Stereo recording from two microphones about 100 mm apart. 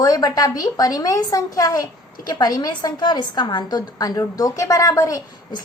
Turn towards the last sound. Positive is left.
turn(degrees=35)  # may be behind; listen again after turning